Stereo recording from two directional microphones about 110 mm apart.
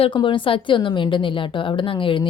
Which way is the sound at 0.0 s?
50° left (ahead or behind).